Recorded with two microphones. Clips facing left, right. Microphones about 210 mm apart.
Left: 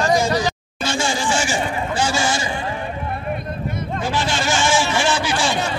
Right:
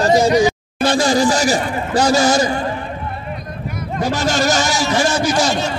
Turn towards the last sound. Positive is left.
turn(degrees=-40)  # may be behind; listen again after turning